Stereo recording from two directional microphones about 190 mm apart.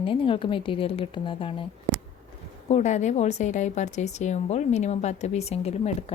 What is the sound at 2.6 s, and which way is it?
A woman's voice, 35° left (ahead or behind).